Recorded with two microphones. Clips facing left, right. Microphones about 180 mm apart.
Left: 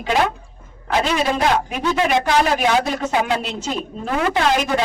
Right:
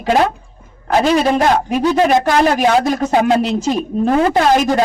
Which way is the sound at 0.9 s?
45° right (ahead or behind).